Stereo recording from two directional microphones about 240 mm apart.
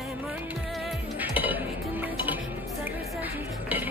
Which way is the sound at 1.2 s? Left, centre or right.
Centre.